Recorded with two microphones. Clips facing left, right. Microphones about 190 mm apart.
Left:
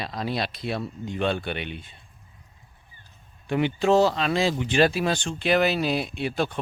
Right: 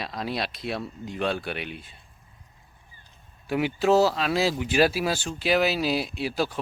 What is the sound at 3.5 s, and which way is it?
Speech, 5° right (ahead or behind).